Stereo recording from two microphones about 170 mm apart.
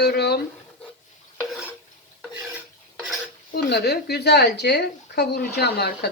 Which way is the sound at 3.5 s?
70° left (ahead or behind).